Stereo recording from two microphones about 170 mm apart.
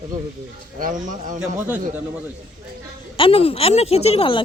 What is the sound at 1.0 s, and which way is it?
Speech, 50° right (ahead or behind).